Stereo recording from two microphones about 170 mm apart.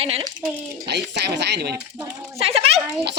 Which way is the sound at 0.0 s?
35° right (ahead or behind).